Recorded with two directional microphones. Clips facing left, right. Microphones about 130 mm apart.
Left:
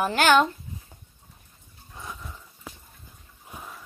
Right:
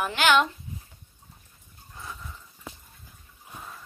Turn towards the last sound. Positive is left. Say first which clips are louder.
# left 1 dB
turn(degrees=10)  # may be behind; listen again after turning